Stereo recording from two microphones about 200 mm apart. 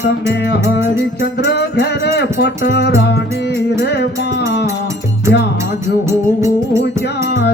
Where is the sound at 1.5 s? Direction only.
55° left (ahead or behind).